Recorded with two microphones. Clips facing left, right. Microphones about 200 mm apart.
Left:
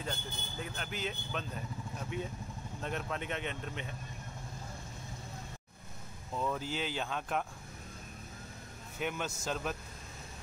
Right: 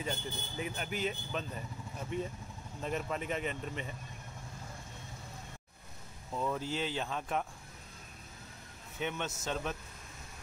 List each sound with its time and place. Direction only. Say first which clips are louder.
0.0 s speech: right 2 dB; 10° right (ahead or behind)
6.3 s speech: right 1 dB; 5° right (ahead or behind)
9.0 s speech: even; centre (ahead or behind)